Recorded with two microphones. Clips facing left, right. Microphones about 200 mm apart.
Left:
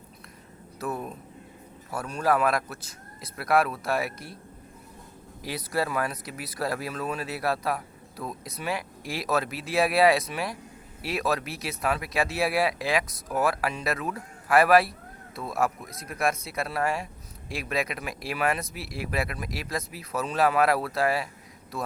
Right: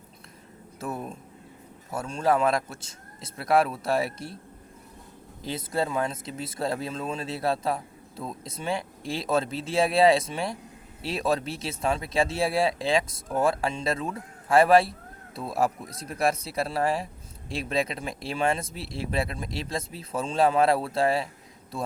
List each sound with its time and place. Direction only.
0.8 s speech: 25° right (ahead or behind)
5.4 s speech: 25° right (ahead or behind)